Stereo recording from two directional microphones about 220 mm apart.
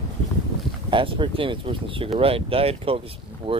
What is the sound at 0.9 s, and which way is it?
Speech, 20° right (ahead or behind).